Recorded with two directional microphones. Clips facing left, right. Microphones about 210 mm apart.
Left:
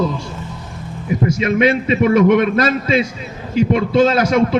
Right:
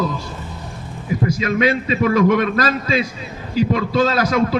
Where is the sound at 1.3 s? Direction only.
25° left (ahead or behind).